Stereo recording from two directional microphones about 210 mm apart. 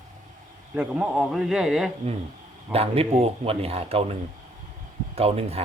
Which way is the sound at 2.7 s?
30° right (ahead or behind).